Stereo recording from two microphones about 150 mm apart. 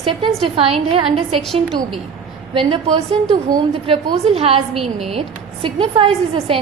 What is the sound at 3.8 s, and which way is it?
Speech, 40° right (ahead or behind).